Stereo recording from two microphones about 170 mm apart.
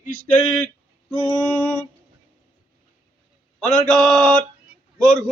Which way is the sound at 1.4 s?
5° left (ahead or behind).